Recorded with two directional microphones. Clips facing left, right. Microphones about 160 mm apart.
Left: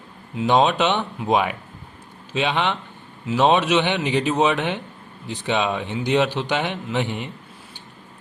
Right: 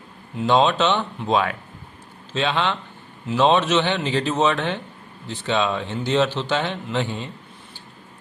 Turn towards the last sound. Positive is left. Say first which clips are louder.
# left 1 dB
turn(degrees=20)  # may be behind; listen again after turning